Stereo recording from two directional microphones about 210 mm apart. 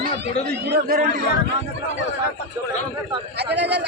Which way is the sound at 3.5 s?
55° right (ahead or behind).